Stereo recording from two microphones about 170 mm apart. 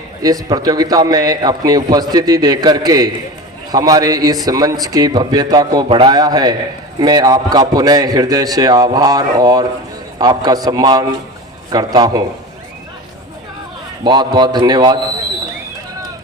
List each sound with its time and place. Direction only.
0.2 s a man's voice: 20° right (ahead or behind)
14.0 s a man's voice: 25° right (ahead or behind)